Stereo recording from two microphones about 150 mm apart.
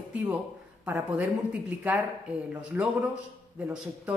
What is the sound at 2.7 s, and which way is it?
Speech, 10° right (ahead or behind).